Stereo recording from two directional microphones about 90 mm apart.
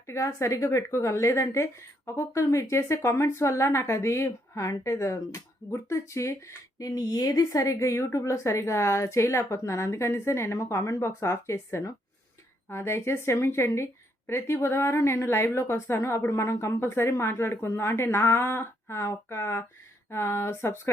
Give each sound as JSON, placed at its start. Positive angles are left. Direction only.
{"t": 0.1, "sound": "a woman's voice", "side_deg": 35}